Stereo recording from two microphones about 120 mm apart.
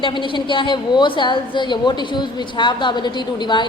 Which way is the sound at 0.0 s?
40° left (ahead or behind).